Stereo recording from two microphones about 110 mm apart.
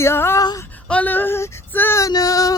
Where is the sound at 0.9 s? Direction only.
15° left (ahead or behind).